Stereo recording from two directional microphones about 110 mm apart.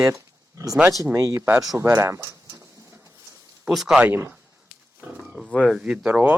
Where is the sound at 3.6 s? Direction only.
5° right (ahead or behind).